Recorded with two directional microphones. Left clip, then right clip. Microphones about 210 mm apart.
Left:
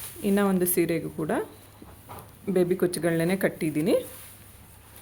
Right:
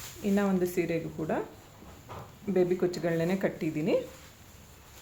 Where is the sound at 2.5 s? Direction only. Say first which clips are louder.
Left 3 dB; 40° left (ahead or behind).